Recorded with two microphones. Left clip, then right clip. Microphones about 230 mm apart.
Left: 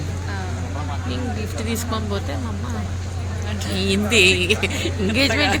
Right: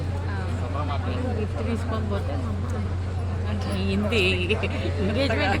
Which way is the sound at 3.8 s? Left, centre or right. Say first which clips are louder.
Left 8 dB; left.